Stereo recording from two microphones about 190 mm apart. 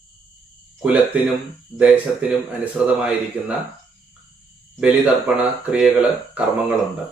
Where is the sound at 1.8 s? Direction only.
5° right (ahead or behind).